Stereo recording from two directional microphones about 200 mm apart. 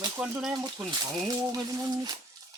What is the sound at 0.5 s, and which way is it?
Speech, 20° right (ahead or behind).